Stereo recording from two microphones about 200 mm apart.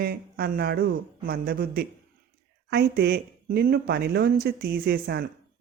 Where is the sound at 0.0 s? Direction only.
50° right (ahead or behind).